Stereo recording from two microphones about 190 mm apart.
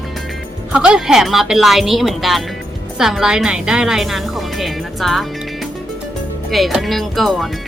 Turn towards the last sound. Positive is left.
turn(degrees=0)  # may be behind; listen again after turning